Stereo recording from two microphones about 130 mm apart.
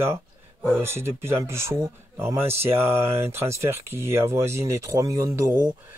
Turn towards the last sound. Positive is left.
turn(degrees=-20)  # may be behind; listen again after turning